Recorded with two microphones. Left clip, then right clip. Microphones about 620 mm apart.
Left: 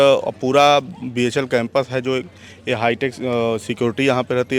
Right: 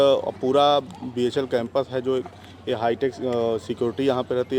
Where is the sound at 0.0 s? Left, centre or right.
Left.